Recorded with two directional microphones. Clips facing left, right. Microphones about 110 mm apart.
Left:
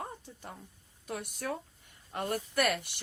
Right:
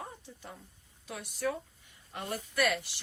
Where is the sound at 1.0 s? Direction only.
45° left (ahead or behind).